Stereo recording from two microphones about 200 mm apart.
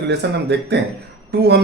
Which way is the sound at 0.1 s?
55° right (ahead or behind).